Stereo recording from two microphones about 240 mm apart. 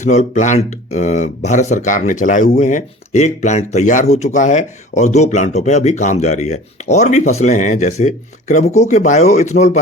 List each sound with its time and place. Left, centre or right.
0.0 s speech: left